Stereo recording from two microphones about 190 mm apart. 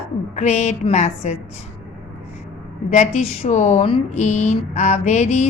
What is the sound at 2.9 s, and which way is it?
A woman's voice, 35° left (ahead or behind).